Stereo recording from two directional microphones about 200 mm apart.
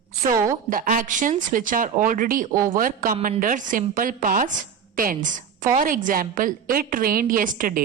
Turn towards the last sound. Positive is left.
turn(degrees=-40)  # may be behind; listen again after turning